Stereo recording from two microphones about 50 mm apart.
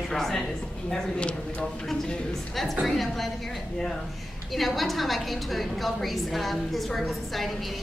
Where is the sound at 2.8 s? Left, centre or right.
Centre.